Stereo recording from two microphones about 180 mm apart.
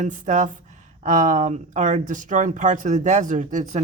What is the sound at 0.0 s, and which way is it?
A woman's voice, 45° right (ahead or behind).